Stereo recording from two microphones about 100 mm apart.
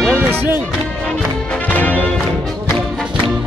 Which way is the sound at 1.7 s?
15° left (ahead or behind).